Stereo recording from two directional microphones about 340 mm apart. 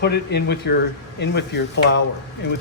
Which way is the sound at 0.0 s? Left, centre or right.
Left.